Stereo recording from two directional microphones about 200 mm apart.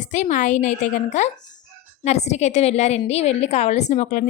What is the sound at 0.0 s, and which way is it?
A woman's voice, 40° left (ahead or behind).